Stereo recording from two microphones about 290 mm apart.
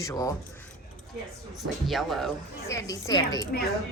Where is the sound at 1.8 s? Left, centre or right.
Centre.